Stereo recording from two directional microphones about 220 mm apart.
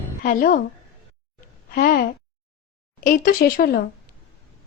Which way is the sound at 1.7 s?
40° left (ahead or behind).